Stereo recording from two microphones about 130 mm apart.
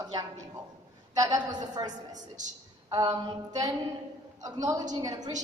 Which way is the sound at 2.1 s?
70° right (ahead or behind).